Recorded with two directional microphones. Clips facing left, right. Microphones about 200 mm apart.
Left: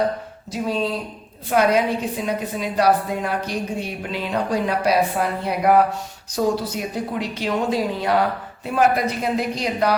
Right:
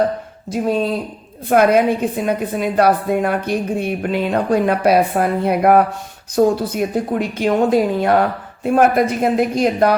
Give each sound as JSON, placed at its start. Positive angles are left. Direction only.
{"t": 0.5, "sound": "a woman's voice", "side_deg": -50}